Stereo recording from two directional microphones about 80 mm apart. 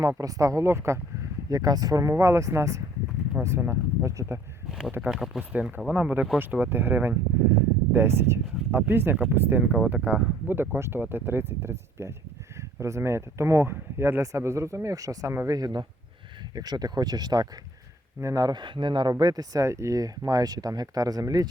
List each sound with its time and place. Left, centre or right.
0.2 s speech: right
5.0 s speech: centre
5.4 s speech: centre; by 17.5 s right
18.2 s speech: right
19.2 s speech: right
19.6 s speech: right